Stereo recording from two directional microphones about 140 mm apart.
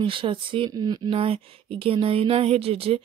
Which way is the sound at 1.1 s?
40° right (ahead or behind).